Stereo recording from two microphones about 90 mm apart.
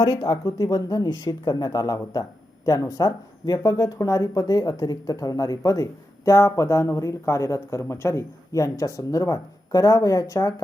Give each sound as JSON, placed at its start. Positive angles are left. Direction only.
{"t": 0.0, "sound": "speech", "side_deg": 45}